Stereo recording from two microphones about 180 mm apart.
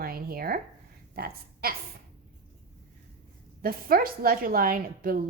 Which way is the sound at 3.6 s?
55° right (ahead or behind).